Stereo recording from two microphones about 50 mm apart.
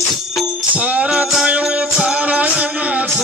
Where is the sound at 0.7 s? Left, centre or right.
Right.